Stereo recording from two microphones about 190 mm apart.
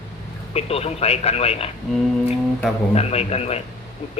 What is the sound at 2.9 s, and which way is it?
Speech, 35° left (ahead or behind).